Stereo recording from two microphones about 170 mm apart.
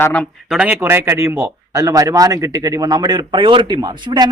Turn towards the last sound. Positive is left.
turn(degrees=-25)  # may be behind; listen again after turning